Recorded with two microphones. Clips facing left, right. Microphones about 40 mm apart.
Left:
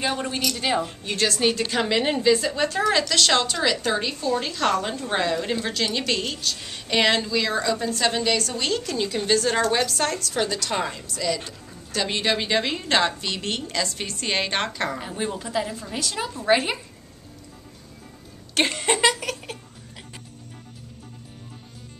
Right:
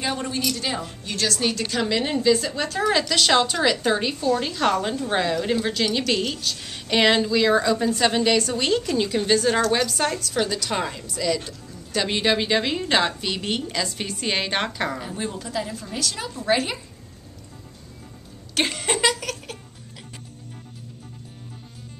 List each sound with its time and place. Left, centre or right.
0.0 s a woman's voice: centre
9.8 s a woman's voice: centre
15.0 s a woman's voice: centre
18.5 s a sound: centre